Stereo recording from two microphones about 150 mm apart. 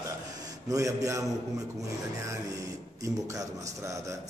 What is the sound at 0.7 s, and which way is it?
Speech, 20° right (ahead or behind).